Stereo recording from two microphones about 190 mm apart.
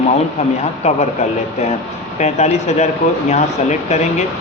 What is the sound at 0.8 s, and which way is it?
Speech, 35° left (ahead or behind).